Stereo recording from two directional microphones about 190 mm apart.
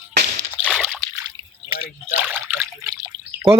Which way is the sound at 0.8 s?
5° left (ahead or behind).